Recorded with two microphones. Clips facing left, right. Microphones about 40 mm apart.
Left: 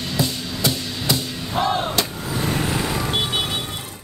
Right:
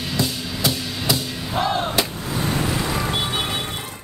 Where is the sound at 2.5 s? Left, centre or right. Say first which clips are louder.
Even; left.